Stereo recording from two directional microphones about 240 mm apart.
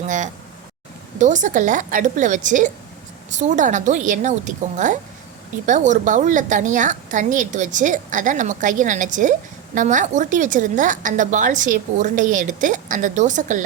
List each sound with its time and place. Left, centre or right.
1.2 s a woman's voice: right